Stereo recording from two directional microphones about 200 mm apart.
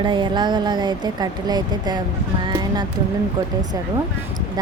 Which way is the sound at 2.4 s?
20° right (ahead or behind).